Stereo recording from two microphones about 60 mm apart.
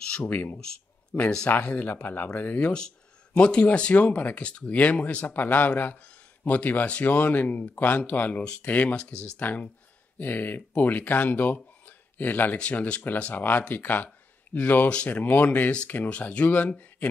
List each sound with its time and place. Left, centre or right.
0.2 s speech: left
12.5 s speech: centre
13.0 s speech: left